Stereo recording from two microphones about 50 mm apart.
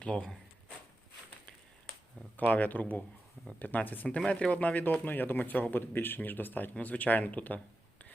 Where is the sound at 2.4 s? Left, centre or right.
Left.